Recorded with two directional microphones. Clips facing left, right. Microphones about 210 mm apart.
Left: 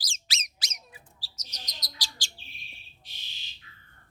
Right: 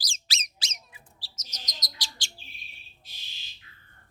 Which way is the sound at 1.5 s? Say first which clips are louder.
Right 1 dB; 20° right (ahead or behind).